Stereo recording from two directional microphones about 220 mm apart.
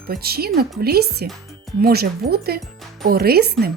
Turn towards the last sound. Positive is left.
turn(degrees=-45)  # may be behind; listen again after turning